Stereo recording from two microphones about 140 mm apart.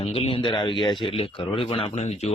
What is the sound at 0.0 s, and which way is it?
Speech, 45° left (ahead or behind).